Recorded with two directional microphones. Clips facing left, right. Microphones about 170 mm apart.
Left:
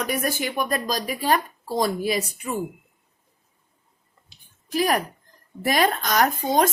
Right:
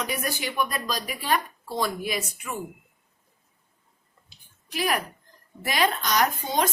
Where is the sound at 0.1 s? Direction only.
50° left (ahead or behind).